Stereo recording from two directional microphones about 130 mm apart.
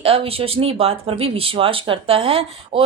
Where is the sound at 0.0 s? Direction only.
45° right (ahead or behind).